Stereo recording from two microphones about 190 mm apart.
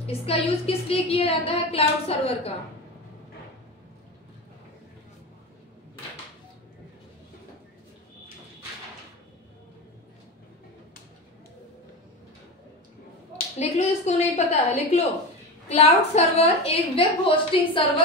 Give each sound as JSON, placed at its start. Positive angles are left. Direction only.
{"t": 0.0, "sound": "a woman's voice", "side_deg": 30}
{"t": 13.6, "sound": "a woman's voice", "side_deg": 35}